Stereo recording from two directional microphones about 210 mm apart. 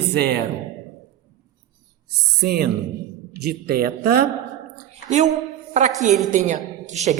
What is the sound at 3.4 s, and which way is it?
Speech, 50° right (ahead or behind).